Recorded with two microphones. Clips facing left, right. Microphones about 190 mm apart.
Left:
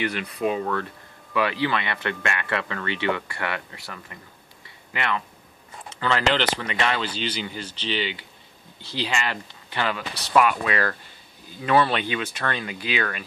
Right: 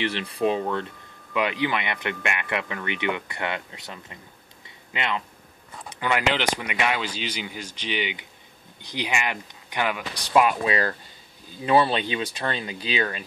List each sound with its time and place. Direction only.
0.0 s speech: 30° right (ahead or behind)
4.6 s a sound: 20° right (ahead or behind)
5.9 s speech: 15° right (ahead or behind)
10.3 s speech: 25° right (ahead or behind)